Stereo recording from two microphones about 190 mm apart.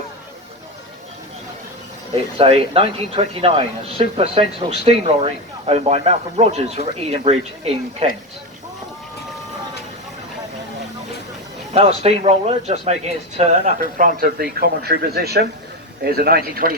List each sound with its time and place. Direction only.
2.4 s speech: 30° right (ahead or behind)
11.7 s speech: 30° right (ahead or behind); by 16.7 s 55° right (ahead or behind)